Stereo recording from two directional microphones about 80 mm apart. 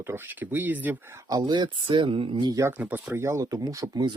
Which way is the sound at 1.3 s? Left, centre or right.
Right.